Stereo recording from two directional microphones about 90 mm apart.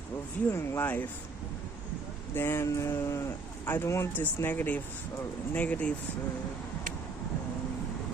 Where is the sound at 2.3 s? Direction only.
25° left (ahead or behind).